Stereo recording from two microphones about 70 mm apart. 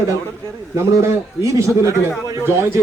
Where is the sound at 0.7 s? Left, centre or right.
Right.